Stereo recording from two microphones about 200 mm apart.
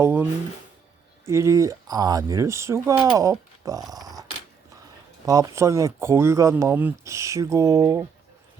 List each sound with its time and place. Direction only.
0.0 s speech: 10° right (ahead or behind)
4.0 s a sound: 20° right (ahead or behind)
5.2 s speech: 15° right (ahead or behind)